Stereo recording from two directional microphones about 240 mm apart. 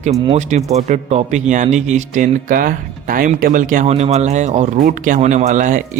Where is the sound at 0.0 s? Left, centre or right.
Right.